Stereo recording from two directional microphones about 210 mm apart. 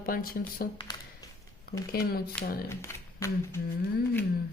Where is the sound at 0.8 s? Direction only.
20° left (ahead or behind).